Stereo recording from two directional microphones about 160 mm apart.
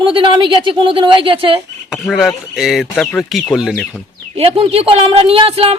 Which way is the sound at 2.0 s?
Centre (ahead or behind).